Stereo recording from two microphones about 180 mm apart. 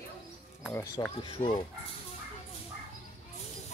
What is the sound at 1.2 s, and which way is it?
Speech, 25° left (ahead or behind).